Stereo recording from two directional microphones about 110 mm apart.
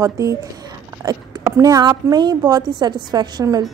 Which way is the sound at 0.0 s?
30° right (ahead or behind).